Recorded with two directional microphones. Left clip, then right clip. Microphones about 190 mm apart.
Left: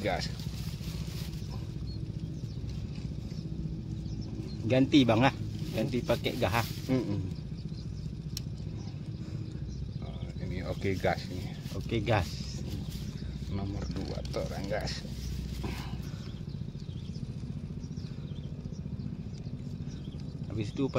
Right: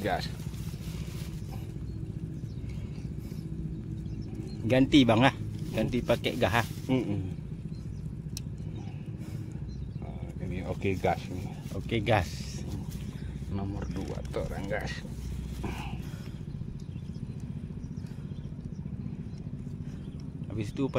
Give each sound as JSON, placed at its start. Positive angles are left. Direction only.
{"t": 4.6, "sound": "speech", "side_deg": -15}
{"t": 10.5, "sound": "speech", "side_deg": -25}
{"t": 11.9, "sound": "speech", "side_deg": -10}
{"t": 13.6, "sound": "speech", "side_deg": -15}
{"t": 20.5, "sound": "speech", "side_deg": -5}